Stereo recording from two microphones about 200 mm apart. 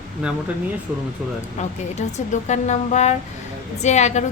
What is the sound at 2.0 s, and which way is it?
A woman's voice, 35° left (ahead or behind).